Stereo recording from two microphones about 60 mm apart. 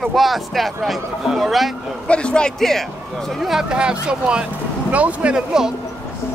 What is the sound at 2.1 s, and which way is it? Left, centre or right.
Speech, centre.